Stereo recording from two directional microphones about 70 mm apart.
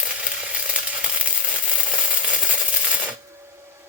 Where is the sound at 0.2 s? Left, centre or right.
Centre.